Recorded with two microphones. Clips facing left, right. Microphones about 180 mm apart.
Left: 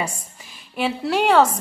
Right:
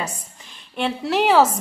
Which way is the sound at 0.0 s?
5° left (ahead or behind).